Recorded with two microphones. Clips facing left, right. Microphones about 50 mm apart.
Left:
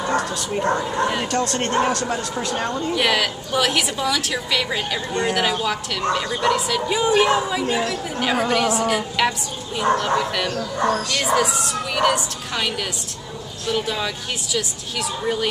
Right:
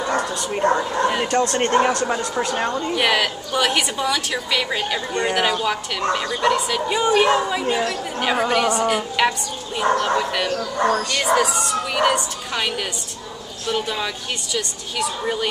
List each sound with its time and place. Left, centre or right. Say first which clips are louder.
0.5 s a woman's voice: right 3 dB; centre